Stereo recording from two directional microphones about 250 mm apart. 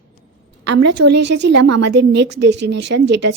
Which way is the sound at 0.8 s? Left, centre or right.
Right.